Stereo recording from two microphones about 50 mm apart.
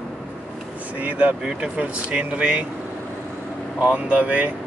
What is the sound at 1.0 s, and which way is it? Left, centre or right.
Speech, right.